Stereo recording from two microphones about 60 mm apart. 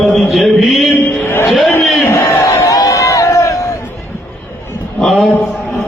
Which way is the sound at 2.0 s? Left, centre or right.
Left.